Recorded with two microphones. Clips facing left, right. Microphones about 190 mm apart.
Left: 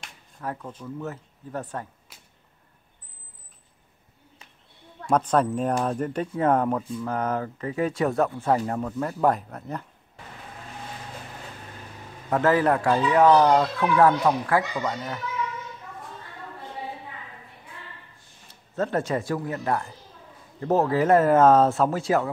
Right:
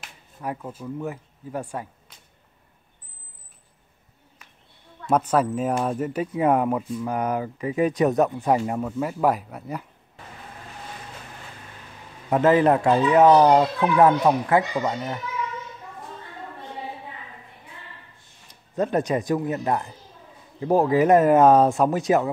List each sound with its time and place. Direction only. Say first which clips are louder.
0.0 s speech: right 2 dB; 10° right (ahead or behind)
2.1 s whip: left 1 dB; 5° left (ahead or behind)
5.0 s speech: right 1 dB; 5° right (ahead or behind)
12.3 s speech: right 3 dB; 20° right (ahead or behind)
18.5 s speech: right 3 dB; 15° right (ahead or behind)